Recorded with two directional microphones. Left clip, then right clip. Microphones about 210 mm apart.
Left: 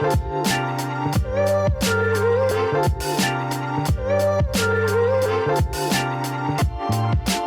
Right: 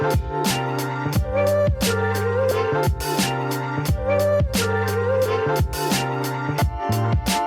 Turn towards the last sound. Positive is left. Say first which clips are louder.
# right 1 dB
turn(degrees=0)  # may be behind; listen again after turning